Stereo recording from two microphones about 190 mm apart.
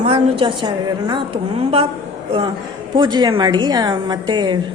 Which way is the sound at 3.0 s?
25° right (ahead or behind).